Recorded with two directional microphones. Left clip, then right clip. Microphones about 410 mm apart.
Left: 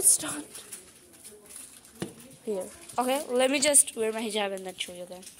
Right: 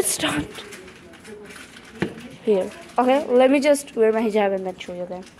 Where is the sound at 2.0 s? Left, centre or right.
Left.